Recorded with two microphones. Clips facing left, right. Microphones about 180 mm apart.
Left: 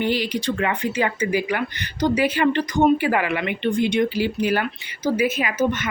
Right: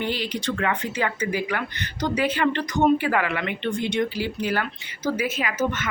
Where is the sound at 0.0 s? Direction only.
15° left (ahead or behind).